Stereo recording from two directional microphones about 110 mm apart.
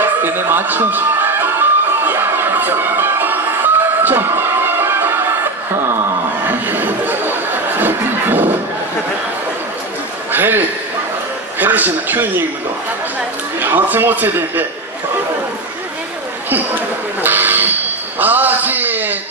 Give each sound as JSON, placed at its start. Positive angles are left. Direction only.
{"t": 0.0, "sound": "music", "side_deg": -20}
{"t": 6.4, "sound": "chatter", "side_deg": -15}
{"t": 10.3, "sound": "a sound", "side_deg": -20}
{"t": 11.6, "sound": "a man's voice", "side_deg": -15}
{"t": 13.6, "sound": "a man's voice", "side_deg": -15}
{"t": 16.4, "sound": "a sound", "side_deg": -15}